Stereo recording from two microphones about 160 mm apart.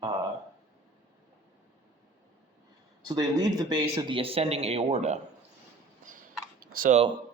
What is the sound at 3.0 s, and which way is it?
Speech, 20° right (ahead or behind).